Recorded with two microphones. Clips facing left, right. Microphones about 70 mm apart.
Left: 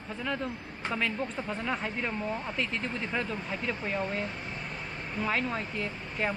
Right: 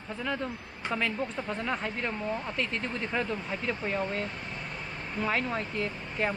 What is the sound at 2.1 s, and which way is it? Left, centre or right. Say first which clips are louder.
Speech: even; centre.